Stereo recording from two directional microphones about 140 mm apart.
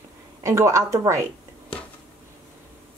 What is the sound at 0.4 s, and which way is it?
Speech, 20° right (ahead or behind).